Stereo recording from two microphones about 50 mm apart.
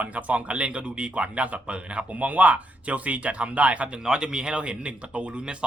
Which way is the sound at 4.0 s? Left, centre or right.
Centre.